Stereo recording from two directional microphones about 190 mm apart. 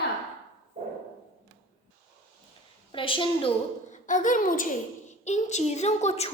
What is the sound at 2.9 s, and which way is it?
A woman's voice, 25° left (ahead or behind).